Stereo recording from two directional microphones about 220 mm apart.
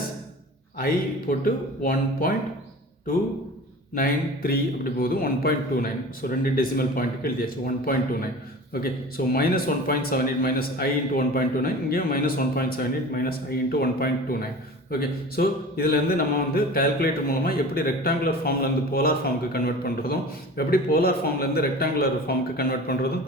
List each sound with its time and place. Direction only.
1.8 s a man's voice: 40° left (ahead or behind)
3.9 s a man's voice: 40° left (ahead or behind)